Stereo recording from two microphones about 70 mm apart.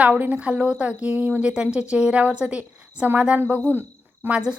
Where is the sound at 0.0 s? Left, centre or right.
Right.